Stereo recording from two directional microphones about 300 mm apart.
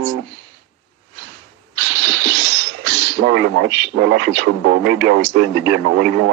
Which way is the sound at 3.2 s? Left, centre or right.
Right.